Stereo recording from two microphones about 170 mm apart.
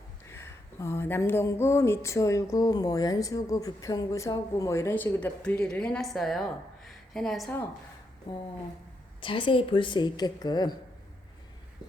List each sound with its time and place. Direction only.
0.3 s speech: 15° left (ahead or behind)
9.2 s a woman's voice: 30° left (ahead or behind)